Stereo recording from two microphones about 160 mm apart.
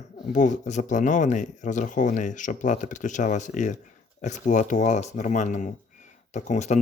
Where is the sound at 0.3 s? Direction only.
50° left (ahead or behind).